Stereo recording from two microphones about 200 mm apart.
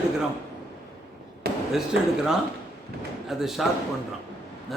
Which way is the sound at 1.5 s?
50° right (ahead or behind).